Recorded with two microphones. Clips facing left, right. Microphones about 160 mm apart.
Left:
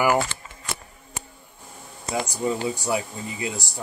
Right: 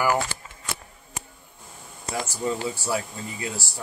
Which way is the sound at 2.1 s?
15° left (ahead or behind).